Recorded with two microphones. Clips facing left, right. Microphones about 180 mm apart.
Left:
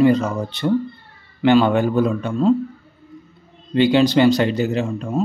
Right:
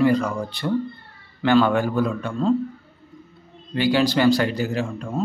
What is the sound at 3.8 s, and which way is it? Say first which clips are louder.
Speech: left 5 dB; 20° left (ahead or behind).